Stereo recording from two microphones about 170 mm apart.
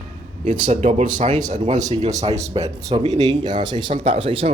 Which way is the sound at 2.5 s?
25° right (ahead or behind).